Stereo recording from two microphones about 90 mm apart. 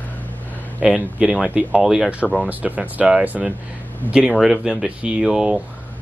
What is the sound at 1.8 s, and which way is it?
Speech, 5° right (ahead or behind).